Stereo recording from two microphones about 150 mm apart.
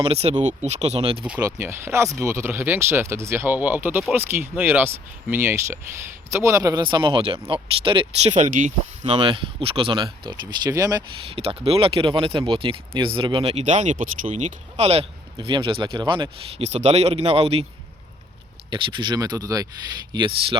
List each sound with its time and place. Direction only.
0.0 s speech: 40° right (ahead or behind)
1.4 s speech: 20° right (ahead or behind); by 8.3 s 35° right (ahead or behind)
8.3 s speech: 50° right (ahead or behind)
9.1 s speech: 35° right (ahead or behind)
11.3 s speech: 40° right (ahead or behind)
16.6 s speech: 45° right (ahead or behind)
18.7 s speech: 30° right (ahead or behind)